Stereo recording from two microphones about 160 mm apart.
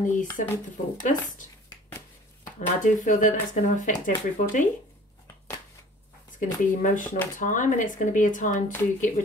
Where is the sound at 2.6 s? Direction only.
50° left (ahead or behind).